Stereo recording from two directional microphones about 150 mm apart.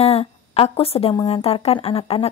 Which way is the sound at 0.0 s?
45° left (ahead or behind).